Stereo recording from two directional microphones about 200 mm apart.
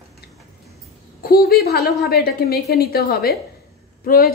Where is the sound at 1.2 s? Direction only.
50° left (ahead or behind).